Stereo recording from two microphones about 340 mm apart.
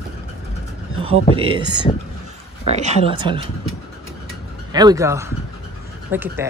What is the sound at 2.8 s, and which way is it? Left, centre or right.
Speech, centre.